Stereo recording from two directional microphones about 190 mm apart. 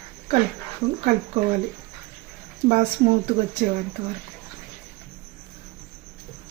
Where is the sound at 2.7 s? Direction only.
40° right (ahead or behind).